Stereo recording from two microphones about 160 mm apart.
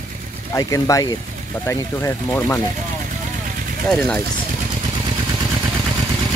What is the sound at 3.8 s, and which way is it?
Speech, 5° left (ahead or behind).